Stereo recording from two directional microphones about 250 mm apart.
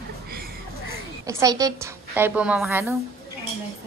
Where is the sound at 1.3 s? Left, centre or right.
Centre.